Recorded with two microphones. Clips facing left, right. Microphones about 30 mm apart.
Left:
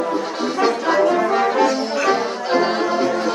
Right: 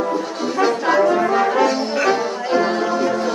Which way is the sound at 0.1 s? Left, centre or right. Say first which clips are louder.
Even; left.